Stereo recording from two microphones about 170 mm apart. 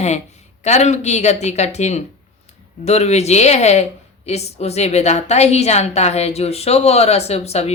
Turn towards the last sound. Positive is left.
turn(degrees=40)  # may be behind; listen again after turning